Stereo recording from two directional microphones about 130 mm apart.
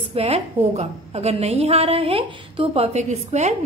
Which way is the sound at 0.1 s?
50° right (ahead or behind).